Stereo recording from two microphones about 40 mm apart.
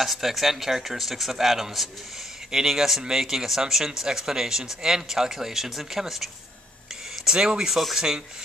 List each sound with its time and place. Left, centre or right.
0.0 s speech: centre